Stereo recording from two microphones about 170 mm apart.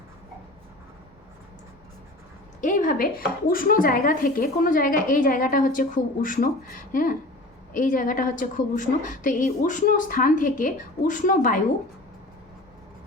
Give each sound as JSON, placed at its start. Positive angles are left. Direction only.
{"t": 2.6, "sound": "speech", "side_deg": 50}